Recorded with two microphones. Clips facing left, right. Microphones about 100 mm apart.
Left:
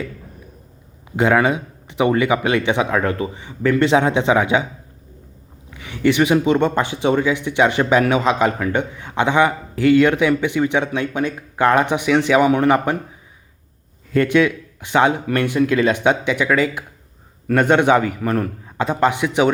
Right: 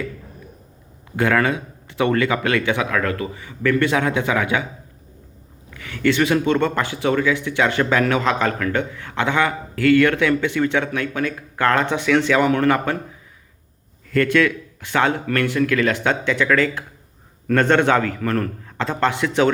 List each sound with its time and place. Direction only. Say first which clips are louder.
1.1 s speech: left 3 dB; 20° left (ahead or behind)
5.7 s speech: left 2 dB; 20° left (ahead or behind)
14.1 s speech: left 2 dB; 20° left (ahead or behind)